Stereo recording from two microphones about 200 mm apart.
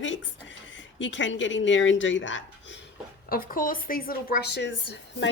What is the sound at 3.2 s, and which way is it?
Speech, 45° left (ahead or behind).